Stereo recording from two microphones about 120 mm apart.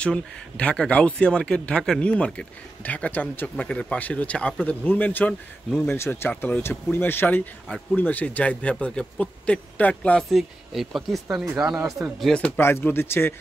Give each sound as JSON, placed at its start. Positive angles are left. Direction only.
{"t": 0.0, "sound": "speech", "side_deg": 10}
{"t": 10.3, "sound": "speech", "side_deg": 0}
{"t": 12.5, "sound": "speech", "side_deg": 20}